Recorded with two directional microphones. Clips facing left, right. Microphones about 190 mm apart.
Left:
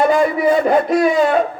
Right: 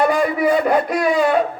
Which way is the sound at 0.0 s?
25° left (ahead or behind).